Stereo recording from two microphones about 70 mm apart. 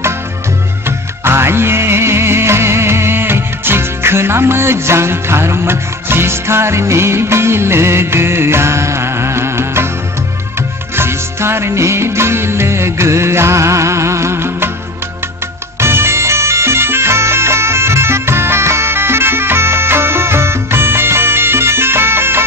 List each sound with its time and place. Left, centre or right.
0.8 s music: right
11.0 s music: right
15.8 s music: right